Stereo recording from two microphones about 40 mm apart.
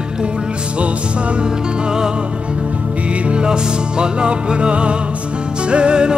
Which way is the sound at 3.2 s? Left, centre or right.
Right.